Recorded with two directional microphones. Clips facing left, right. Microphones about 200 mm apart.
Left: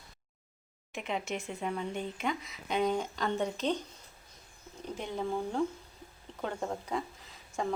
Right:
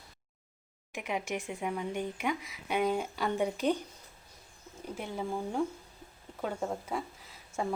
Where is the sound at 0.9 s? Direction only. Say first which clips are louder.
Right 1 dB; 10° right (ahead or behind).